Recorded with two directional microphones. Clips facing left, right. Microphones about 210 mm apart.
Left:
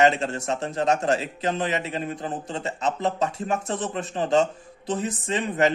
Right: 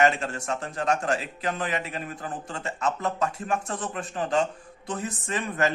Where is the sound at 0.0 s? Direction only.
25° left (ahead or behind).